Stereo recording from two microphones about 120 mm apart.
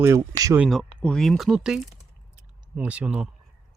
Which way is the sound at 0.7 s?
5° left (ahead or behind).